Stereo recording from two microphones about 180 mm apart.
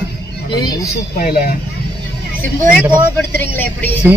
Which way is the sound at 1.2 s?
55° left (ahead or behind).